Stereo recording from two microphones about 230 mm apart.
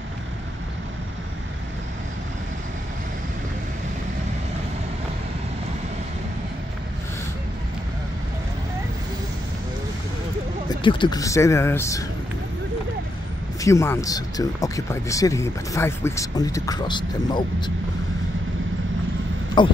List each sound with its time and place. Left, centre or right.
10.7 s speech: left
13.6 s speech: centre
19.6 s speech: centre